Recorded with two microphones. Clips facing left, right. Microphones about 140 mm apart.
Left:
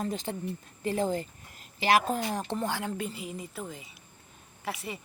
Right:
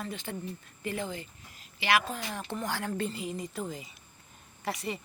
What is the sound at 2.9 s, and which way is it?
A woman's voice, 10° left (ahead or behind).